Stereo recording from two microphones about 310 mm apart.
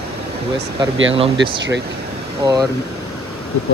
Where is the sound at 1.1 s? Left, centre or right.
Centre.